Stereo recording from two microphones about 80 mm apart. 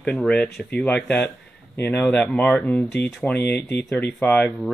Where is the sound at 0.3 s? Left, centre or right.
Centre.